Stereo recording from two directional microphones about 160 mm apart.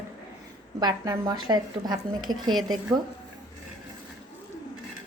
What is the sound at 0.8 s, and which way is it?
A woman's voice, 20° right (ahead or behind).